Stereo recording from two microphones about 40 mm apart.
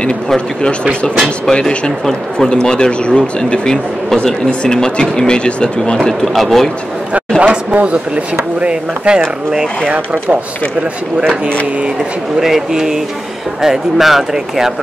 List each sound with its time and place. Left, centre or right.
1.5 s speech: centre
6.2 s speech: centre
7.3 s speech: right
9.8 s speech: right
12.4 s speech: centre